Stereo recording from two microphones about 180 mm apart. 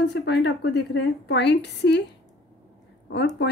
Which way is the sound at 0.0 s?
70° left (ahead or behind).